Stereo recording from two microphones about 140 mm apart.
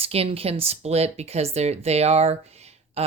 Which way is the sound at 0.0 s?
45° right (ahead or behind).